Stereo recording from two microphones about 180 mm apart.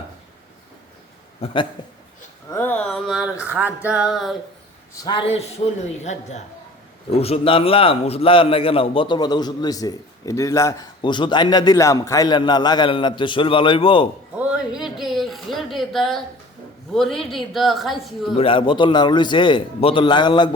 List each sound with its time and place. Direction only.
1.4 s a man's voice: 35° left (ahead or behind)
2.5 s a man's voice: 10° left (ahead or behind)
3.4 s a sound: 10° right (ahead or behind)
3.8 s a man's voice: 5° right (ahead or behind)
5.0 s a man's voice: 30° left (ahead or behind)
14.3 s a sound: 5° right (ahead or behind)
16.9 s a man's voice: centre (ahead or behind)
18.3 s a man's voice: 30° left (ahead or behind)